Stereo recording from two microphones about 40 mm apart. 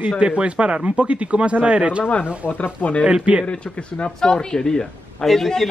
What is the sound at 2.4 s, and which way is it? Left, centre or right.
Speech, left.